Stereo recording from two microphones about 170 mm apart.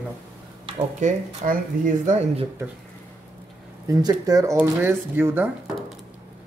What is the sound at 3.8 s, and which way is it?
Speech, 20° right (ahead or behind).